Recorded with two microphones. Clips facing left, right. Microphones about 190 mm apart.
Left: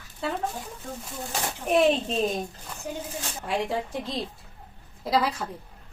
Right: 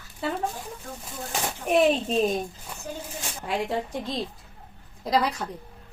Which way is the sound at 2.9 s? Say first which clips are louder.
Left 2 dB; 15° left (ahead or behind).